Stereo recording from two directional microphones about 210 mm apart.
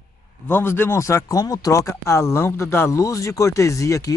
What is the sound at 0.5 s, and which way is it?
Speech, 10° left (ahead or behind).